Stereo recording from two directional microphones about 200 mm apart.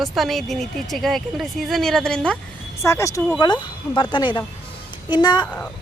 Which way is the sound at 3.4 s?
20° left (ahead or behind).